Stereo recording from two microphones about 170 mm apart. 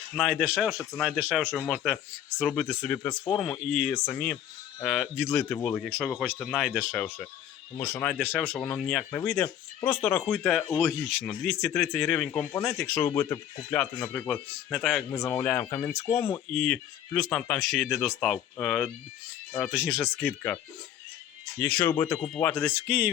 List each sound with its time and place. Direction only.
0.2 s speech: centre (ahead or behind)
2.8 s speech: 10° left (ahead or behind)
13.1 s speech: 20° left (ahead or behind); by 15.0 s centre (ahead or behind)
15.1 s speech: 15° left (ahead or behind)
16.5 s speech: 5° left (ahead or behind)
20.0 s speech: 5° left (ahead or behind)
21.6 s speech: 10° left (ahead or behind)
22.9 s speech: 10° right (ahead or behind)